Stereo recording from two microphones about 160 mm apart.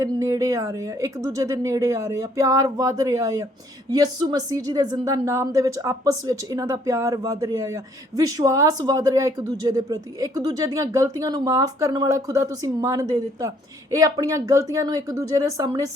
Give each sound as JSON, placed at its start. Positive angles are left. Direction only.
{"t": 0.0, "sound": "a woman's voice", "side_deg": -20}